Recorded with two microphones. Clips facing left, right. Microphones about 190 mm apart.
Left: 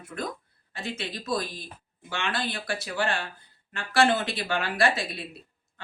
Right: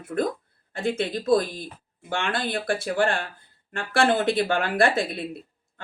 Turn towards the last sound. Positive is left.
turn(degrees=-55)  # may be behind; listen again after turning